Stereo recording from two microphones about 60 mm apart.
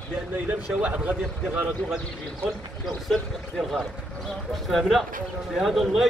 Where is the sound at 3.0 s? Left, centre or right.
Centre.